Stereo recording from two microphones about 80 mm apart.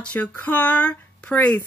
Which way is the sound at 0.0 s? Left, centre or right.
Centre.